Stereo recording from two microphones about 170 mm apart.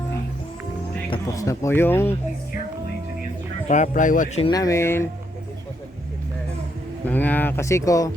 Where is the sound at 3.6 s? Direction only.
45° left (ahead or behind).